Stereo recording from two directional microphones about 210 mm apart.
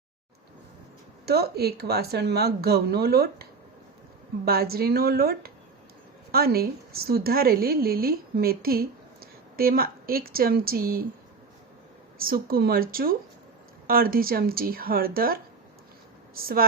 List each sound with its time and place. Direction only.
1.2 s a woman's voice: 50° right (ahead or behind)
4.4 s a woman's voice: 45° right (ahead or behind)
12.2 s a woman's voice: 45° right (ahead or behind)